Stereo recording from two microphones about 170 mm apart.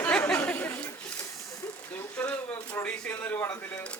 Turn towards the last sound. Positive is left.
turn(degrees=10)  # may be behind; listen again after turning